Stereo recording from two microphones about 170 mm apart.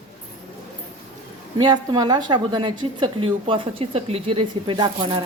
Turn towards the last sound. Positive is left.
turn(degrees=-30)  # may be behind; listen again after turning